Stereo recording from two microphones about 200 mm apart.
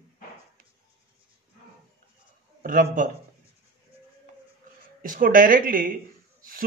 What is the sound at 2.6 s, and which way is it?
Speech, 45° right (ahead or behind).